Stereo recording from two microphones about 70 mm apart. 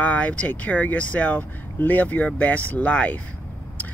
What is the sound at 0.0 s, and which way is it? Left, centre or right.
Speech, left.